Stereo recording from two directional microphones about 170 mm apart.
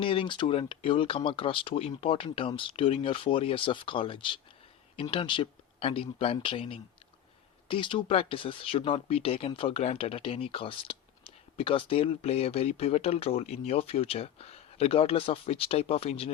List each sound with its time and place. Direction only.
0.0 s speech: 30° left (ahead or behind)